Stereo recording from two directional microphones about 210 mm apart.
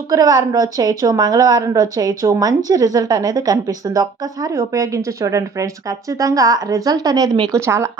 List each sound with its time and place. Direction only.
0.1 s a woman's voice: 15° right (ahead or behind)